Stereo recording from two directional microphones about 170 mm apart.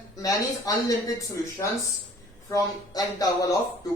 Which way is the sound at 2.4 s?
20° left (ahead or behind).